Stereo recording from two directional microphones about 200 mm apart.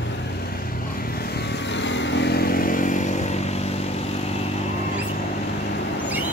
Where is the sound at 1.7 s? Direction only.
65° left (ahead or behind); by 3.3 s 35° left (ahead or behind).